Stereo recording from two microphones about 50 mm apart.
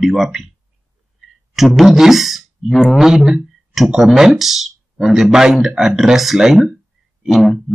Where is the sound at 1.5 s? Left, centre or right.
Centre.